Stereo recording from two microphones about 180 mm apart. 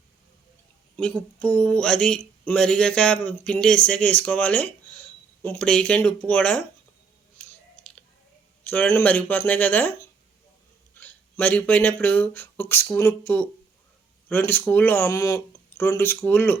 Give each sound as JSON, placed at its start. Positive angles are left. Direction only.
{"t": 0.9, "sound": "speech", "side_deg": 5}
{"t": 8.6, "sound": "speech", "side_deg": 10}